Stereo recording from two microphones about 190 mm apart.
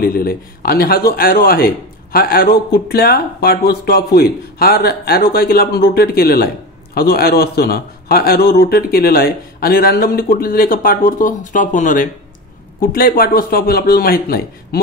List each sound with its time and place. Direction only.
0.0 s speech: 50° left (ahead or behind)